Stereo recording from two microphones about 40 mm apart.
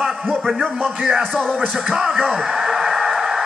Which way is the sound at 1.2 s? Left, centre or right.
Left.